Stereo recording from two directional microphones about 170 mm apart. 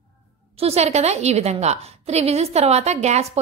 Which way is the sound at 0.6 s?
35° right (ahead or behind).